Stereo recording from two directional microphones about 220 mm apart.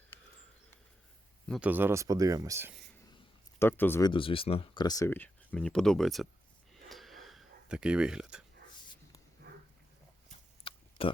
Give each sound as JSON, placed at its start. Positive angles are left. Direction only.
{"t": 1.5, "sound": "speech", "side_deg": -5}
{"t": 3.6, "sound": "speech", "side_deg": 10}
{"t": 4.1, "sound": "speech", "side_deg": 25}
{"t": 6.8, "sound": "a sound", "side_deg": 0}
{"t": 9.5, "sound": "dog", "side_deg": -45}
{"t": 10.6, "sound": "a sound", "side_deg": 25}